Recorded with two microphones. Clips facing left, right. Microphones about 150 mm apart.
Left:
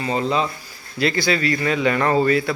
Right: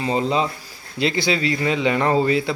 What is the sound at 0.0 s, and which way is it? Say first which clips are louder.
Speech: right 1 dB; 25° right (ahead or behind).